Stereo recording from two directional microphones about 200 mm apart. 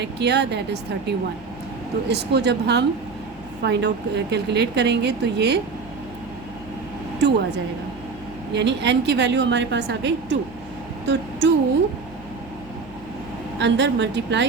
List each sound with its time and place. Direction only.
0.0 s a woman's voice: 55° right (ahead or behind)
7.2 s a woman's voice: 55° right (ahead or behind)
8.5 s a woman's voice: 60° right (ahead or behind)
13.6 s a woman's voice: 65° right (ahead or behind)